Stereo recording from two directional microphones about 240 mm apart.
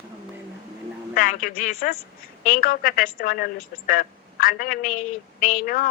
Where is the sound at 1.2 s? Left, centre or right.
Left.